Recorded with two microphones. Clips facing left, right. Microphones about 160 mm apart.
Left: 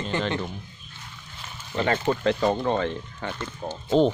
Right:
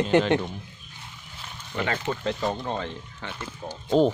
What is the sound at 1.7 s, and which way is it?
Speech, 20° left (ahead or behind).